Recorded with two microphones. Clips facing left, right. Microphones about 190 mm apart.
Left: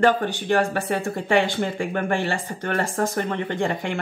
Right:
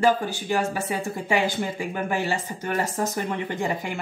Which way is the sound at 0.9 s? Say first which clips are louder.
Left 5 dB; 5° right (ahead or behind).